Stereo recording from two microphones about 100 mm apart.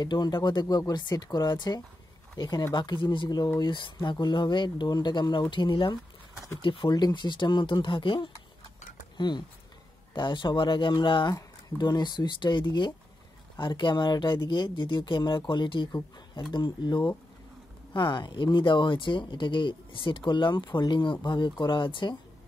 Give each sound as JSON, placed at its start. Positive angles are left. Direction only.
{"t": 0.0, "sound": "speech", "side_deg": 45}
{"t": 6.9, "sound": "speech", "side_deg": 45}
{"t": 18.1, "sound": "speech", "side_deg": 50}